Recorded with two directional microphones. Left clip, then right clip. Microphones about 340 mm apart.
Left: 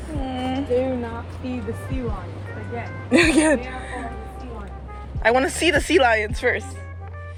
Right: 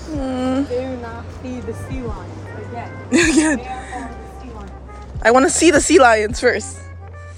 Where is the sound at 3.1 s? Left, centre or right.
Centre.